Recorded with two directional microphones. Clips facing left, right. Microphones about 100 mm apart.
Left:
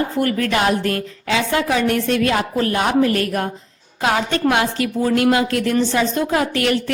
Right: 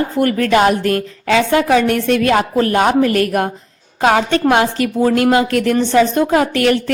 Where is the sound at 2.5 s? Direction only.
45° right (ahead or behind).